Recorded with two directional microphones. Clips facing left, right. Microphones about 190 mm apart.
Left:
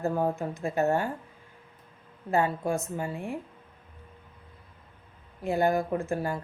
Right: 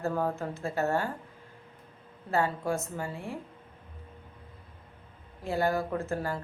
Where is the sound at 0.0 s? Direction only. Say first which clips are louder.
Left 3 dB; 15° left (ahead or behind).